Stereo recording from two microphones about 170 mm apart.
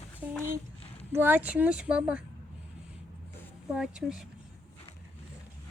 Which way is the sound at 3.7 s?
5° right (ahead or behind).